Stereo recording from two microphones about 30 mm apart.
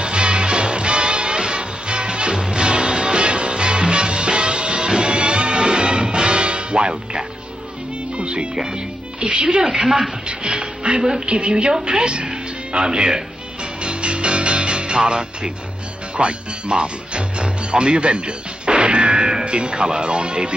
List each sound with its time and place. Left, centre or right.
0.0 s music: right
9.2 s speech: right
9.6 s speech: centre
10.2 s speech: right
13.8 s music: right
16.2 s speech: right